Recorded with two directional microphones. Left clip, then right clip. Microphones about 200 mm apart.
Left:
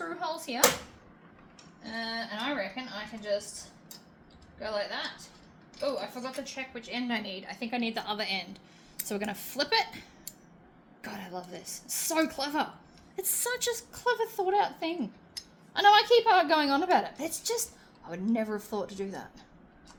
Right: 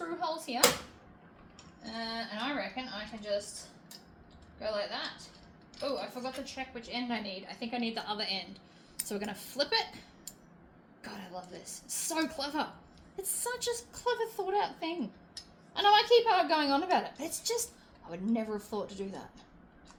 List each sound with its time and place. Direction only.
0.2 s hands: 35° left (ahead or behind)
1.8 s a sound: 35° left (ahead or behind)
4.6 s a woman's voice: 35° left (ahead or behind)